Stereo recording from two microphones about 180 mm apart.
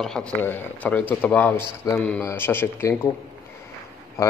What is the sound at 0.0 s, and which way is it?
A man's voice, 5° left (ahead or behind).